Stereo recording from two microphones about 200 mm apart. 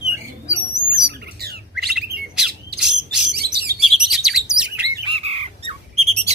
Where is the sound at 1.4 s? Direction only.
50° right (ahead or behind).